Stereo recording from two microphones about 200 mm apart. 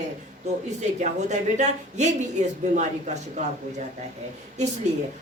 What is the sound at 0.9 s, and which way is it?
Speech, 35° right (ahead or behind).